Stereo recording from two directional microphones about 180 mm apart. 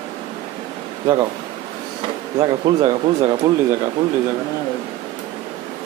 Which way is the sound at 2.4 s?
30° right (ahead or behind).